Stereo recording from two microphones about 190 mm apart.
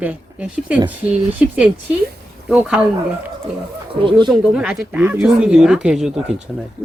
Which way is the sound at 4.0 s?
25° right (ahead or behind).